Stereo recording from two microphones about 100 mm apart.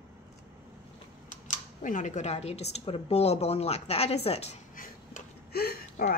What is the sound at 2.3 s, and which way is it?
A woman's voice, 90° left.